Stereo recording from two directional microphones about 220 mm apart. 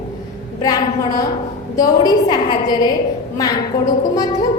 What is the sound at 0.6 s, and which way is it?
A woman's voice, 15° left (ahead or behind).